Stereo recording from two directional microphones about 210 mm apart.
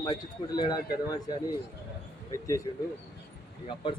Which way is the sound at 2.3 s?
15° left (ahead or behind).